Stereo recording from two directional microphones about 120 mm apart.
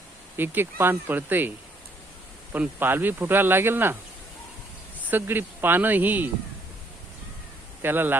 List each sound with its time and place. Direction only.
0.3 s speech: 15° right (ahead or behind)
5.0 s speech: 15° right (ahead or behind)
7.8 s a man's voice: 15° right (ahead or behind)